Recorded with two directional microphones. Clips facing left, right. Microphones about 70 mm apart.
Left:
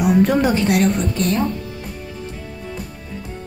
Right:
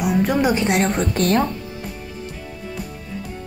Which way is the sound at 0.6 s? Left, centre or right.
Right.